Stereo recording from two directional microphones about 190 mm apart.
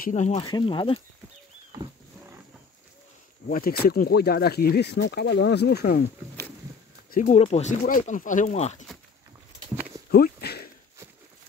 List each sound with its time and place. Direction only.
0.0 s speech: 40° left (ahead or behind)
0.4 s speech: 25° left (ahead or behind)
3.4 s speech: 50° left (ahead or behind)
7.2 s speech: 35° left (ahead or behind)
10.1 s a sound: 55° left (ahead or behind)